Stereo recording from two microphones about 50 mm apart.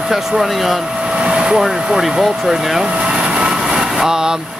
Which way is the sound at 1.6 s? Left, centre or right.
Centre.